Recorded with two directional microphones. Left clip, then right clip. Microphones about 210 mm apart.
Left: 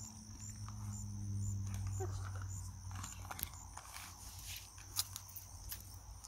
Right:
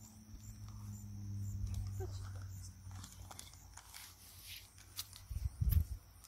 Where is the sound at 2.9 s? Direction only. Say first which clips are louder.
Left 7 dB; centre (ahead or behind).